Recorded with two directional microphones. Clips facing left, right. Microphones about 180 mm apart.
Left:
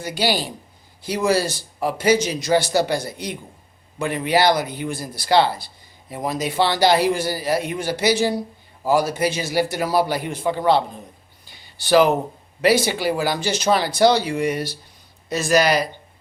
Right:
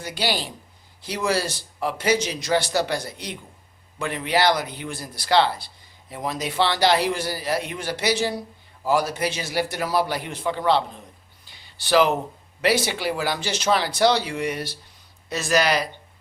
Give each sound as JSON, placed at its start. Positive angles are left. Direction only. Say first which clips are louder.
{"t": 0.2, "sound": "a man's voice", "louder": "left 4 dB", "side_deg": 5}
{"t": 3.1, "sound": "a man's voice", "louder": "left 5 dB", "side_deg": 45}
{"t": 4.0, "sound": "a man's voice", "louder": "left 3 dB", "side_deg": 5}
{"t": 12.6, "sound": "a man's voice", "louder": "left 4 dB", "side_deg": 0}